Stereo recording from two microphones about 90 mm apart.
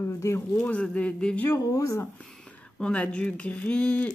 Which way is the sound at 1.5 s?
40° left (ahead or behind).